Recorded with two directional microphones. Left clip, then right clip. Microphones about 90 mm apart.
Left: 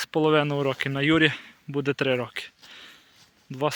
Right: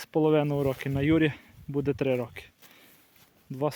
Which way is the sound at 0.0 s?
25° right (ahead or behind).